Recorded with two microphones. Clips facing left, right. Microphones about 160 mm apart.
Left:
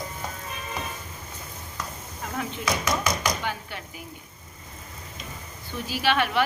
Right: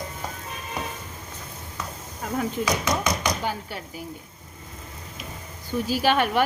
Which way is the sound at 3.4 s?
35° right (ahead or behind).